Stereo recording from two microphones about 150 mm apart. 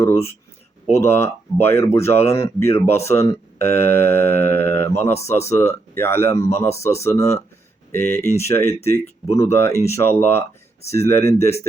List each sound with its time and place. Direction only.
0.0 s speech: 20° left (ahead or behind)